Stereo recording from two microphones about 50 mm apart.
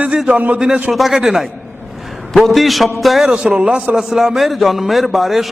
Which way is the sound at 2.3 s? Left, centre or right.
Centre.